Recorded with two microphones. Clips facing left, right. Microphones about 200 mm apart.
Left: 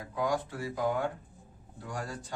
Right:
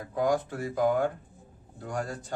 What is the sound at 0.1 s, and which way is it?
Speech, 50° right (ahead or behind).